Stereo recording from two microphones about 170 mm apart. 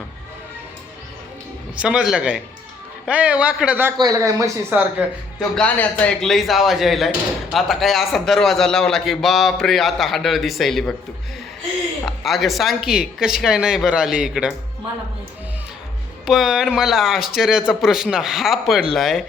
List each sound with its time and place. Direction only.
1.8 s a man's voice: 5° right (ahead or behind)
3.9 s speech: 20° right (ahead or behind)
5.4 s a man's voice: 5° left (ahead or behind)
12.0 s a man's voice: centre (ahead or behind)
16.2 s a man's voice: centre (ahead or behind)